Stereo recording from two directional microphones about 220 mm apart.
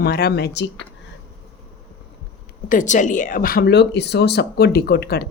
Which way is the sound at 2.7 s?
35° left (ahead or behind).